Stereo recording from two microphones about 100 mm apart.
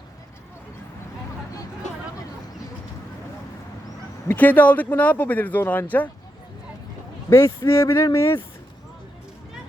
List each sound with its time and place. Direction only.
4.3 s speech: 15° left (ahead or behind)
7.3 s speech: 30° left (ahead or behind)